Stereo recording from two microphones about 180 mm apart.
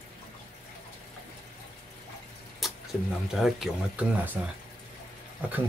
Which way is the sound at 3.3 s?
Centre (ahead or behind).